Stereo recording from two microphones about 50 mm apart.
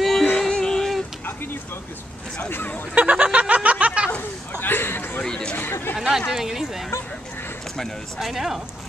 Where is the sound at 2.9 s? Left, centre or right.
Right.